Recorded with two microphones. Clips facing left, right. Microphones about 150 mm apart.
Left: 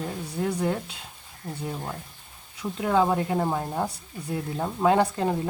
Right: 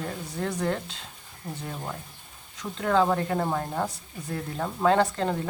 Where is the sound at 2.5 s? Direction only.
10° left (ahead or behind).